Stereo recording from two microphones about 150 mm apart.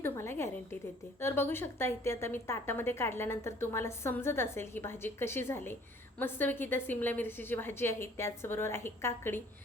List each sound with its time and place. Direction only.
0.0 s a woman's voice: 15° left (ahead or behind)